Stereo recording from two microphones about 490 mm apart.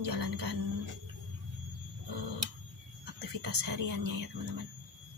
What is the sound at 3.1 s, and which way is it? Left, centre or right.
Speech, right.